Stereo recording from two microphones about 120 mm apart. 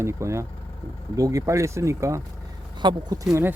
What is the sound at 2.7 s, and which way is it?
Speech, 40° right (ahead or behind).